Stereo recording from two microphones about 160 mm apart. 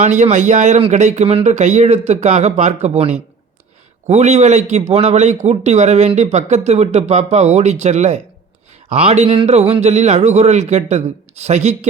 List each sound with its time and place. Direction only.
0.0 s a man's voice: 45° right (ahead or behind)